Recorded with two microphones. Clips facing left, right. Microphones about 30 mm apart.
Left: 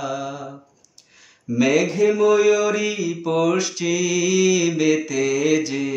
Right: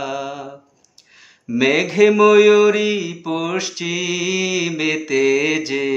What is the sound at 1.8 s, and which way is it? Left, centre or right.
Speech, right.